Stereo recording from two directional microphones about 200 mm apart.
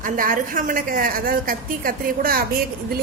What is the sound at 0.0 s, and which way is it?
Speech, 45° right (ahead or behind).